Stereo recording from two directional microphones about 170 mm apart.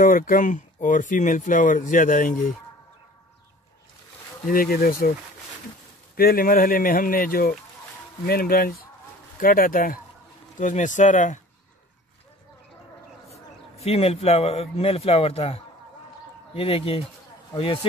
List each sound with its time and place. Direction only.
0.0 s speech: 55° left (ahead or behind)
4.5 s speech: 55° left (ahead or behind)
6.1 s speech: 60° left (ahead or behind)
13.8 s a man's voice: 35° left (ahead or behind)